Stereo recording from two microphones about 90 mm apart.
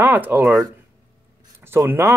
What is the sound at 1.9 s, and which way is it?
Speech, 25° right (ahead or behind).